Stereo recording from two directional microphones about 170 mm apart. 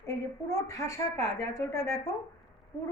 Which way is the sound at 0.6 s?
20° left (ahead or behind).